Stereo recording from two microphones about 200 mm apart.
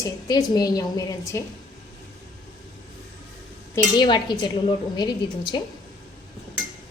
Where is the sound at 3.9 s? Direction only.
20° left (ahead or behind).